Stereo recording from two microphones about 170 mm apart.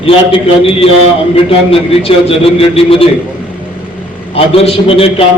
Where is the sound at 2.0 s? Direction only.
35° left (ahead or behind).